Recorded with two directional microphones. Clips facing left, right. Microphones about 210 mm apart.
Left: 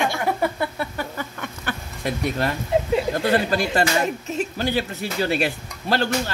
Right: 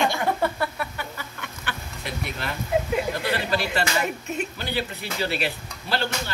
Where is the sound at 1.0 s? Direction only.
45° left (ahead or behind).